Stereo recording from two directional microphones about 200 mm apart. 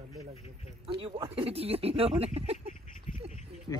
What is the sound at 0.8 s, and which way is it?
Speech, 25° right (ahead or behind).